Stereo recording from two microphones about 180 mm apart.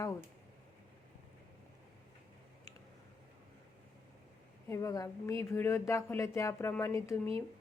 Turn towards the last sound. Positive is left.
turn(degrees=15)  # may be behind; listen again after turning